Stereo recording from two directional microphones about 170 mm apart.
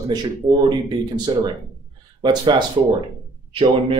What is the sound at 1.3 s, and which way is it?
A man's voice, 30° right (ahead or behind).